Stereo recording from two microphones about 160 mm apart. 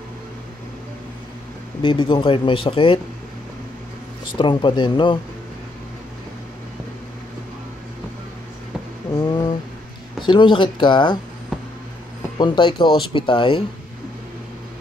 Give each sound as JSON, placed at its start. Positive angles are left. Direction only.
{"t": 1.8, "sound": "speech", "side_deg": 30}
{"t": 4.4, "sound": "speech", "side_deg": 30}
{"t": 9.1, "sound": "a sound", "side_deg": 25}
{"t": 10.2, "sound": "speech", "side_deg": 30}
{"t": 12.4, "sound": "speech", "side_deg": 25}